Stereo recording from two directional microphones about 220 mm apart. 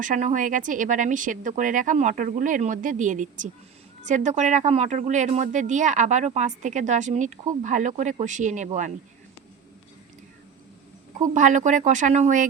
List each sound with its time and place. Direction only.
0.0 s speech: 35° right (ahead or behind)
11.3 s speech: 35° right (ahead or behind)